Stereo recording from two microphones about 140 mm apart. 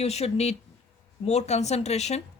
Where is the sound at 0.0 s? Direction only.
50° left (ahead or behind).